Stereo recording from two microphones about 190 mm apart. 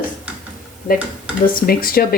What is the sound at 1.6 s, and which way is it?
Speech, 50° left (ahead or behind).